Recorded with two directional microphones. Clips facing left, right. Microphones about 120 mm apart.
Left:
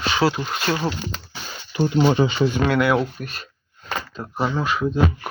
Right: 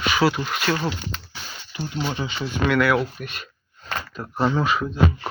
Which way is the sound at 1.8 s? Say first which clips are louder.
Left 10 dB; 75° left (ahead or behind).